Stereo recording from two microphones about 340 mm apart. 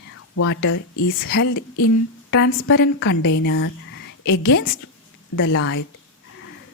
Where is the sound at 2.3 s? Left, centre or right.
Left.